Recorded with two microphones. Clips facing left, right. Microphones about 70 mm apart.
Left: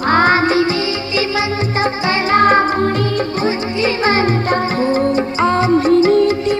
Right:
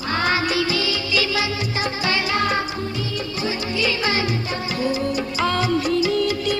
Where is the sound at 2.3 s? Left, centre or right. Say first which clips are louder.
Left 10 dB; left.